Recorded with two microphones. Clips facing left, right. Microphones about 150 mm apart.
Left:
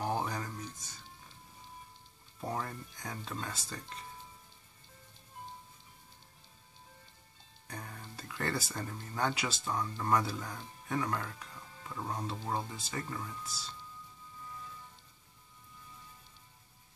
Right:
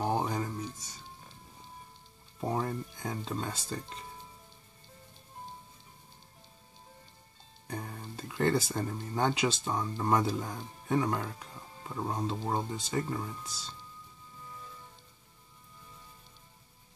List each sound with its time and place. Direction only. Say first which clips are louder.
0.0 s a sound: right 4 dB; 25° right (ahead or behind)
2.4 s music: right 6 dB; 25° right (ahead or behind)
7.6 s speech: right 6 dB; 25° right (ahead or behind)